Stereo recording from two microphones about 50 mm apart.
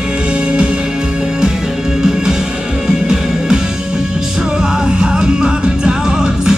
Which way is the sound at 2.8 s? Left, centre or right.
Centre.